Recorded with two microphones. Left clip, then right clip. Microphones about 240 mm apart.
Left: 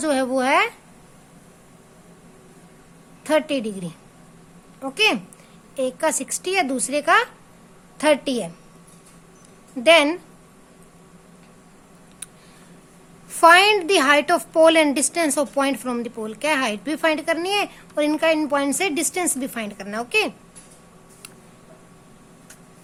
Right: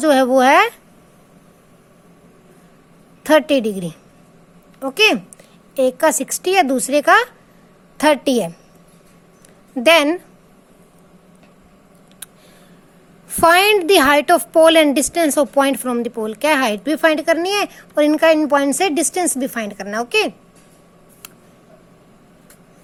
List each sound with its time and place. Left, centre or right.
0.0 s a woman's voice: right
3.2 s a woman's voice: right
9.7 s a woman's voice: right
13.3 s a woman's voice: centre